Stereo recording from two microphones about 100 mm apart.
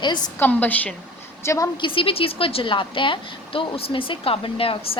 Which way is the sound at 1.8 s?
60° left (ahead or behind).